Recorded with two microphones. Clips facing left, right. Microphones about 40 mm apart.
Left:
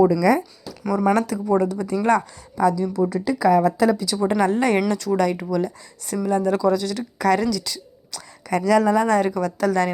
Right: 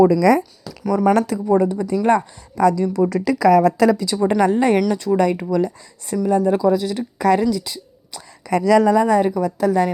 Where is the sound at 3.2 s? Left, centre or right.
Right.